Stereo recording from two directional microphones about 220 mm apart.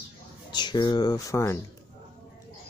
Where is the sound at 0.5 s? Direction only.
20° left (ahead or behind).